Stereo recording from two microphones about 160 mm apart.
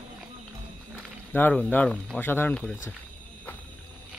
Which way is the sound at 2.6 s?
5° left (ahead or behind).